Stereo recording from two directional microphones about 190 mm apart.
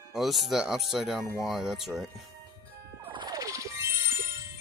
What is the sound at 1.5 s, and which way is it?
Speech, centre (ahead or behind).